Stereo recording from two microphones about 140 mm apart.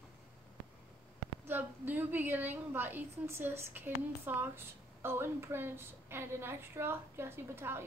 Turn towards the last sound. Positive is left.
turn(degrees=-15)  # may be behind; listen again after turning